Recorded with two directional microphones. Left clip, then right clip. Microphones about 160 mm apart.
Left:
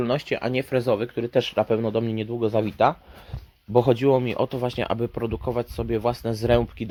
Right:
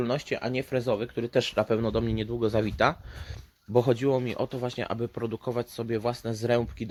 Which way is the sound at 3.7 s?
10° left (ahead or behind).